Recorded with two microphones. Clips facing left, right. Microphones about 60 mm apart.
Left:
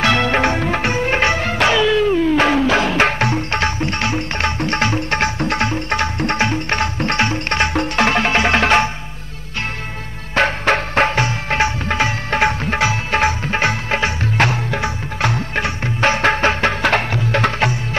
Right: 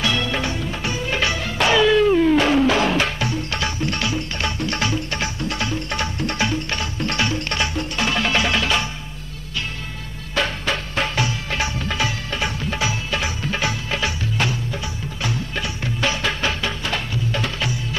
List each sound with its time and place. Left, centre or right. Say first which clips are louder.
0.0 s music: left 7 dB; left
1.7 s music: right 1 dB; centre
3.0 s music: left 6 dB; left
5.9 s tabla: left 5 dB; left
7.7 s music: left 7 dB; left
8.2 s music: left 5 dB; left
10.3 s music: left 7 dB; left
14.4 s music: left 8 dB; left
16.8 s music: left 8 dB; left